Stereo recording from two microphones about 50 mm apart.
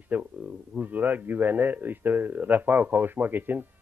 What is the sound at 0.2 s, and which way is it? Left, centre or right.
A man's voice, right.